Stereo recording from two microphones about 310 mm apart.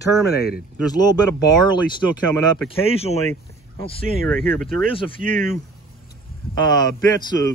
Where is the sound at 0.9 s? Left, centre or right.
Centre.